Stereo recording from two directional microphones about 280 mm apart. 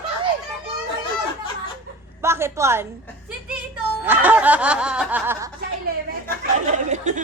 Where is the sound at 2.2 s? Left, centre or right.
Centre.